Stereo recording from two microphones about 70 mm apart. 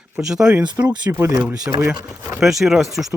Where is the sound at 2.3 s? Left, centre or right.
Centre.